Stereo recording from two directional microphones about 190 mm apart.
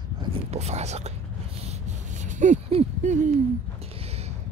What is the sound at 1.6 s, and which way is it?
Owl, 35° right (ahead or behind).